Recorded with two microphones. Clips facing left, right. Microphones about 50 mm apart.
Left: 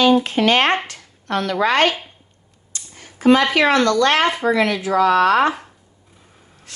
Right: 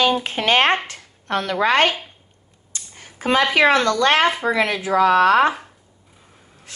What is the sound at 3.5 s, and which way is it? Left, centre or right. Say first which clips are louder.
Speech: left 1 dB; centre.